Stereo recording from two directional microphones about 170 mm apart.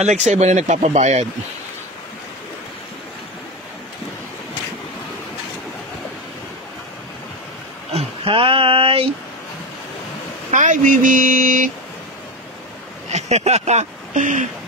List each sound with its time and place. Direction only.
0.0 s speech: 40° right (ahead or behind)
7.9 s a sound: 30° right (ahead or behind)
10.5 s speech: 50° right (ahead or behind)
13.1 s speech: 40° right (ahead or behind)